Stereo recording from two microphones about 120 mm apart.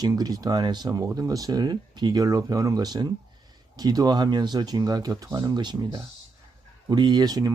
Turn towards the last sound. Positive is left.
turn(degrees=-30)  # may be behind; listen again after turning